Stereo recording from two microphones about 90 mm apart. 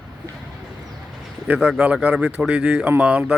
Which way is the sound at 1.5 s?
10° right (ahead or behind).